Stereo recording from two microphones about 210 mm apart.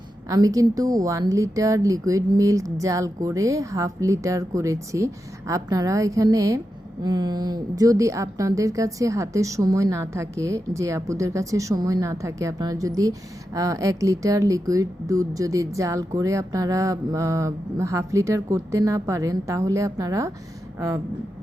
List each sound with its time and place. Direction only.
0.3 s a woman's voice: 15° right (ahead or behind)